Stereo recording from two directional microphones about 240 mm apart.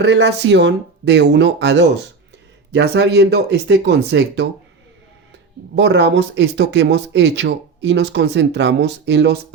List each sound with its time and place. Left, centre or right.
0.0 s speech: right
5.7 s speech: right